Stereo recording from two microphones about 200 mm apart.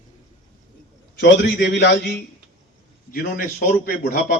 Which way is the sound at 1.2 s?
50° left (ahead or behind).